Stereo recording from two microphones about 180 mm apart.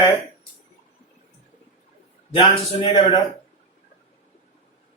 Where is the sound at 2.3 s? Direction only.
30° left (ahead or behind).